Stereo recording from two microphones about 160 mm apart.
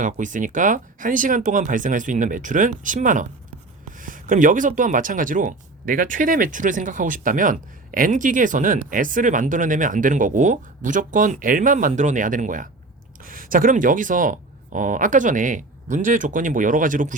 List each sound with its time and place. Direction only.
0.0 s speech: 55° right (ahead or behind)